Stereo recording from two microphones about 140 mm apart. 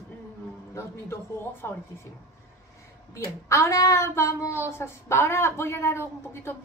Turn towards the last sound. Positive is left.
turn(degrees=15)  # may be behind; listen again after turning